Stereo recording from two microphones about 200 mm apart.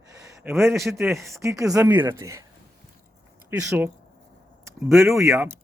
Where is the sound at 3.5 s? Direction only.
10° right (ahead or behind).